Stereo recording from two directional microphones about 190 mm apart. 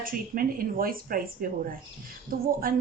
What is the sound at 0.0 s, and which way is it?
Speech, 45° right (ahead or behind).